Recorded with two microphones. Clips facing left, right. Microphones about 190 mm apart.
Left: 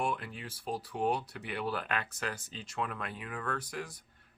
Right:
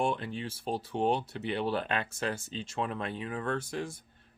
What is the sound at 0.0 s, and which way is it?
Speech, 25° right (ahead or behind).